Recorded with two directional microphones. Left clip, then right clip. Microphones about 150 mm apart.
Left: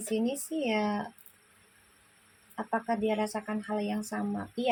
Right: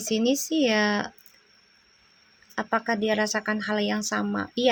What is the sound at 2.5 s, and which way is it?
Speech, 55° right (ahead or behind).